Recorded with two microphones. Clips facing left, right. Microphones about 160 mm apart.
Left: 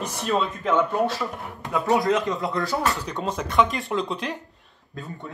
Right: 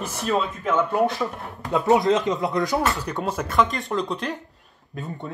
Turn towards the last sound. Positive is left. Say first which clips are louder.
# right 3 dB
turn(degrees=-20)  # may be behind; listen again after turning